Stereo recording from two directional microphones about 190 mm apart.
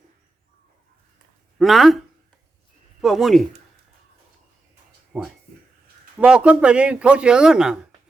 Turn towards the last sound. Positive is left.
turn(degrees=-5)  # may be behind; listen again after turning